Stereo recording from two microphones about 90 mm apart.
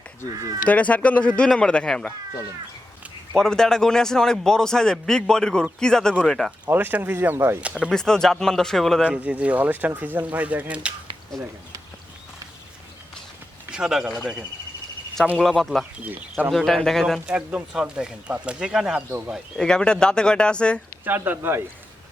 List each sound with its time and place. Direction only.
0.7 s a man's voice: 15° left (ahead or behind)
3.3 s a man's voice: 5° left (ahead or behind)
6.7 s speech: 20° right (ahead or behind)
7.6 s speech: 10° right (ahead or behind)
7.9 s a man's voice: 5° left (ahead or behind)
9.0 s speech: 15° right (ahead or behind)
13.7 s speech: 10° right (ahead or behind)
15.4 s speech: centre (ahead or behind)
17.2 s speech: 15° right (ahead or behind)
19.5 s a man's voice: 10° left (ahead or behind)
21.0 s speech: 25° right (ahead or behind)